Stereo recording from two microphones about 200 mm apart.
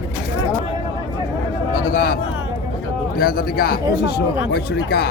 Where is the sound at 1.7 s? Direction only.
45° left (ahead or behind).